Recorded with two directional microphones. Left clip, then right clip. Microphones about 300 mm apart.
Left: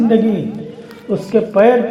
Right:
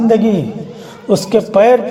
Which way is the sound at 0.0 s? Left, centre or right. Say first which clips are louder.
Right 2 dB; right.